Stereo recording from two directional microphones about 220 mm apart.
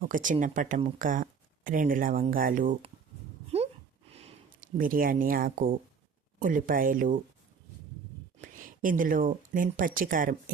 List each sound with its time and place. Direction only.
0.0 s speech: 35° right (ahead or behind)
3.5 s a sound: 30° right (ahead or behind)
4.1 s speech: 30° right (ahead or behind)
8.4 s speech: 40° right (ahead or behind)